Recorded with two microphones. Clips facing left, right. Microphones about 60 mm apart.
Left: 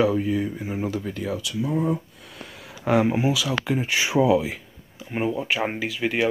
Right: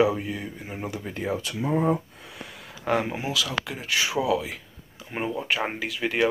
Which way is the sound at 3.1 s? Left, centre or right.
Centre.